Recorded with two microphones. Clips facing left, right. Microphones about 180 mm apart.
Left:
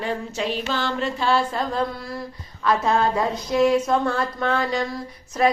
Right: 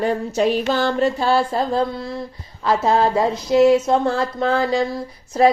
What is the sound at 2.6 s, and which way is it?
Speech, 30° right (ahead or behind).